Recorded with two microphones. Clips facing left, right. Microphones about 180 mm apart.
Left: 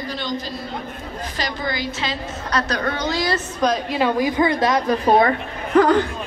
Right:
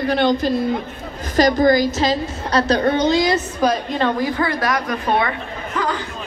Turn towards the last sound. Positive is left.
turn(degrees=50)  # may be behind; listen again after turning